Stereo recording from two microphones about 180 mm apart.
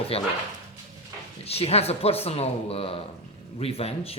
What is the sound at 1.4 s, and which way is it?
Speech, 35° left (ahead or behind).